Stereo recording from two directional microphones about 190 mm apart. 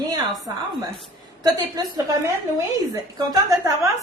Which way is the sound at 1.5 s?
20° right (ahead or behind).